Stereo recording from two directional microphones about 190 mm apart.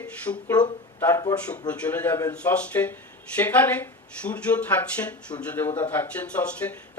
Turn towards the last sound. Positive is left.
turn(degrees=5)  # may be behind; listen again after turning